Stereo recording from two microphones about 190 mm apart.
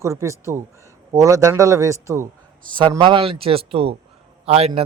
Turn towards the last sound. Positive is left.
turn(degrees=-30)  # may be behind; listen again after turning